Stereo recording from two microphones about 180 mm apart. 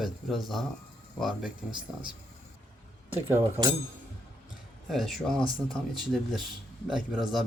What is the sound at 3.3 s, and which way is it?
Speech, 15° right (ahead or behind).